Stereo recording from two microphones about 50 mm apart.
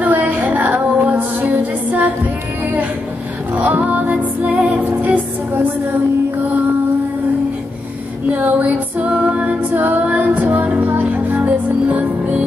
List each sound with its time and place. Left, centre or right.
0.0 s music: right
3.5 s music: right
8.3 s a sound: right
9.1 s music: right